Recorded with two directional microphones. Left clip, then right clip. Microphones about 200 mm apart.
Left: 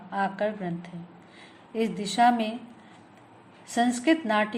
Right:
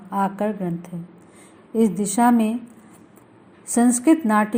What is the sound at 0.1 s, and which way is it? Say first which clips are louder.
A woman's voice: right 4 dB; 35° right (ahead or behind).